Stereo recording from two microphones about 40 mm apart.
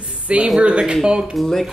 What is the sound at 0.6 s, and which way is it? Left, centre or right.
Speech, right.